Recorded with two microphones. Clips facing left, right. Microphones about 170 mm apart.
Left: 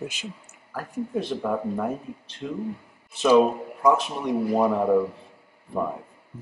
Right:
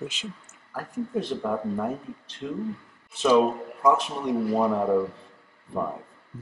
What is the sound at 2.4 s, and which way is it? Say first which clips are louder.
A man's voice: even; 5° left (ahead or behind).